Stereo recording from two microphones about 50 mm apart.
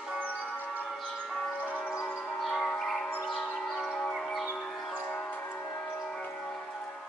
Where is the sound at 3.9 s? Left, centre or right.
Centre.